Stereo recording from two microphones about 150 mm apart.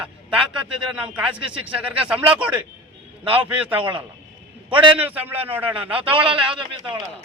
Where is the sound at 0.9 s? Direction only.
5° right (ahead or behind).